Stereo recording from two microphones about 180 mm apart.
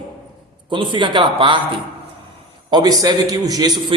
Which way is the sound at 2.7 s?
20° right (ahead or behind).